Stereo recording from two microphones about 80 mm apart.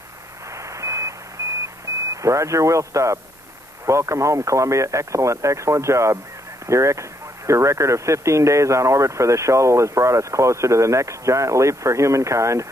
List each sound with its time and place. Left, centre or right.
0.6 s radio: right
1.4 s beep: right
2.2 s speech: right